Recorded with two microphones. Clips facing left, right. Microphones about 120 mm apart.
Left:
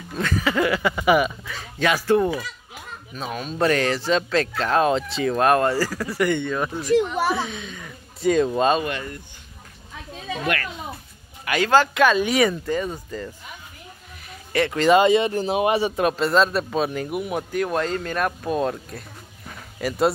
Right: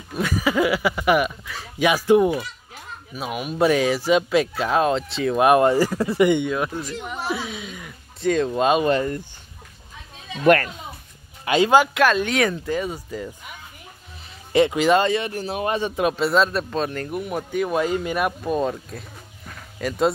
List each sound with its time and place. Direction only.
0.1 s a man's voice: 10° right (ahead or behind)
1.8 s speech: 15° right (ahead or behind)
5.4 s speech: 15° right (ahead or behind)
7.3 s speech: 5° right (ahead or behind)
8.2 s a man's voice: 5° left (ahead or behind)
8.8 s speech: 35° right (ahead or behind)
10.4 s a child's voice: 45° right (ahead or behind)
11.4 s a man's voice: 20° right (ahead or behind)
11.9 s a man's voice: centre (ahead or behind)
14.5 s speech: 20° right (ahead or behind)
15.0 s speech: 20° left (ahead or behind)
16.0 s a man's voice: 5° right (ahead or behind)